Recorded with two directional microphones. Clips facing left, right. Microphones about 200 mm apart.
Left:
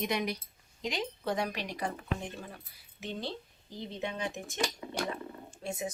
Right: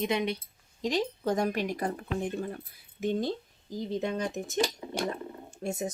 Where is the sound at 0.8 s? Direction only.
40° right (ahead or behind).